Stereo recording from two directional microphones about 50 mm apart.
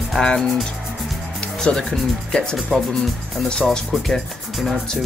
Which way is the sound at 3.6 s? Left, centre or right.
Centre.